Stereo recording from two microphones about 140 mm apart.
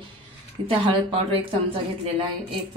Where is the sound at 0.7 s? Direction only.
40° right (ahead or behind).